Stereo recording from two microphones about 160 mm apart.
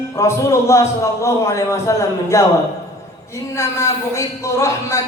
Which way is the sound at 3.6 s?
15° left (ahead or behind).